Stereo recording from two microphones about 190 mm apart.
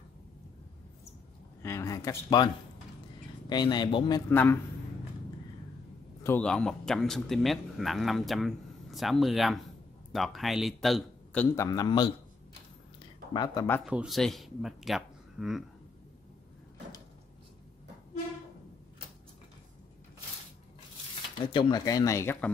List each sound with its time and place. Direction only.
1.6 s speech: 15° left (ahead or behind)
4.3 s speech: 10° left (ahead or behind)
6.2 s speech: 5° left (ahead or behind)
11.5 s speech: 15° left (ahead or behind)
13.3 s speech: 20° left (ahead or behind)
13.8 s speech: 5° right (ahead or behind)
21.4 s speech: 25° left (ahead or behind)